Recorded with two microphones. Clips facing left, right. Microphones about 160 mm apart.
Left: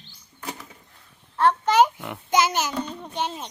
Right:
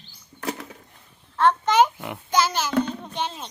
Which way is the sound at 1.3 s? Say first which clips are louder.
Even; 10° left (ahead or behind).